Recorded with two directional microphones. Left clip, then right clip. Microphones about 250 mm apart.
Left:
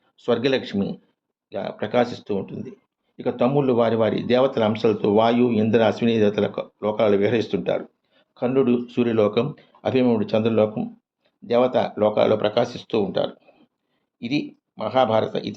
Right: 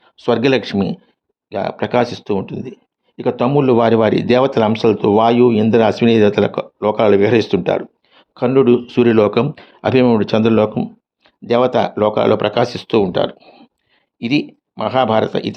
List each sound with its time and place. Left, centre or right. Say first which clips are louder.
0.0 s speech: right 6 dB; right